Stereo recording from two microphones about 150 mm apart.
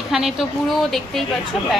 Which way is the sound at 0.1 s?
Centre (ahead or behind).